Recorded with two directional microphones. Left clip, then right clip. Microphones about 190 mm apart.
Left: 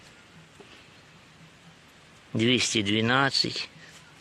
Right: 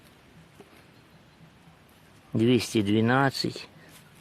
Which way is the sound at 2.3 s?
30° right (ahead or behind).